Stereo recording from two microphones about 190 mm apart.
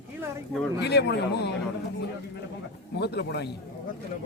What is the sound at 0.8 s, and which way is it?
Speech, 60° left (ahead or behind).